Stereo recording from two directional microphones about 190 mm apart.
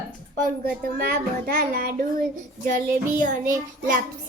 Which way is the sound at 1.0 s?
50° right (ahead or behind).